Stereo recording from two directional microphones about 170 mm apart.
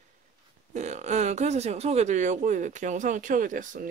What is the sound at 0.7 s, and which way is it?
Speech, 45° right (ahead or behind).